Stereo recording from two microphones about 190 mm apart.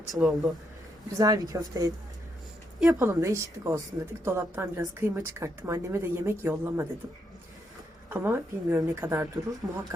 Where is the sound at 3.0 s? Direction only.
15° right (ahead or behind).